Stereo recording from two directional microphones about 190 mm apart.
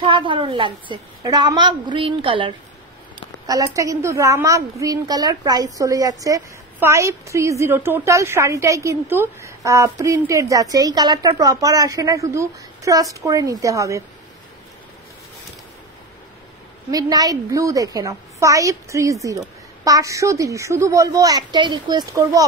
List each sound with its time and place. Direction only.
0.0 s a woman's voice: 25° right (ahead or behind)
3.4 s a woman's voice: 15° right (ahead or behind)
16.9 s a woman's voice: 20° right (ahead or behind)